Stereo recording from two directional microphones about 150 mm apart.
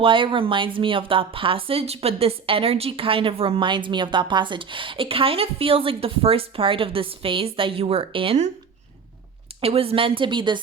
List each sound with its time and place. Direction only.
0.0 s speech: 35° right (ahead or behind)
9.6 s speech: 40° right (ahead or behind)